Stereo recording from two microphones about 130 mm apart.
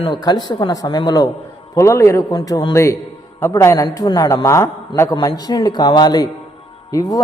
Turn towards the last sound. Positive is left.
turn(degrees=30)  # may be behind; listen again after turning